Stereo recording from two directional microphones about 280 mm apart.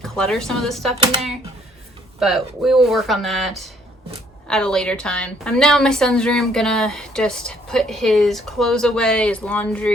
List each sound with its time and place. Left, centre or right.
0.0 s a woman's voice: centre
2.1 s a woman's voice: centre